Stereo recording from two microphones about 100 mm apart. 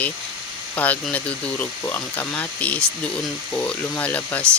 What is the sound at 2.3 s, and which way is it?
Speech, 15° left (ahead or behind).